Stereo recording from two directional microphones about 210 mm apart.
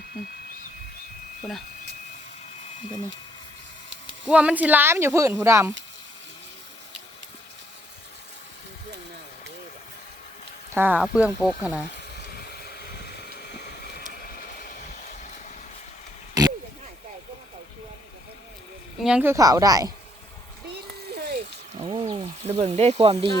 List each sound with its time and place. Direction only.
4.3 s speech: 5° right (ahead or behind)
10.8 s speech: 5° right (ahead or behind)
12.4 s vehicle: 45° left (ahead or behind)
16.4 s a sound: 15° right (ahead or behind)
19.0 s speech: 5° right (ahead or behind)
21.1 s a sound: 50° right (ahead or behind)
21.8 s speech: 25° right (ahead or behind)